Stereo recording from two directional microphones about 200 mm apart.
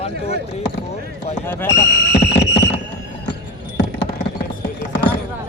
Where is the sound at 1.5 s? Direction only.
10° left (ahead or behind).